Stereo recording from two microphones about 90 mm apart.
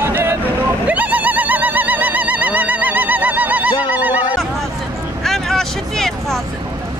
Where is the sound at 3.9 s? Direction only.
20° right (ahead or behind).